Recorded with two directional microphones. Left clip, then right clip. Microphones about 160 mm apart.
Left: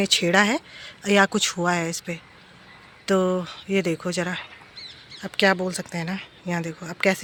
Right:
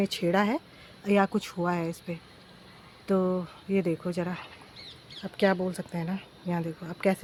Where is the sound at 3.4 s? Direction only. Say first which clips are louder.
Left 5 dB; 5° left (ahead or behind).